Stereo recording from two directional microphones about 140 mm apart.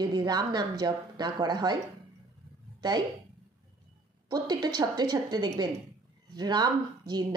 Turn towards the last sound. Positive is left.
turn(degrees=-30)  # may be behind; listen again after turning